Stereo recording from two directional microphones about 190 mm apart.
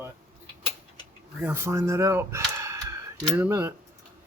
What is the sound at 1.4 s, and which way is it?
Speech, 15° right (ahead or behind).